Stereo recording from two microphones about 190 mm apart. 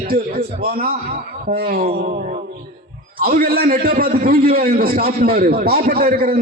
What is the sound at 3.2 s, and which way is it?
A man's voice, 50° right (ahead or behind).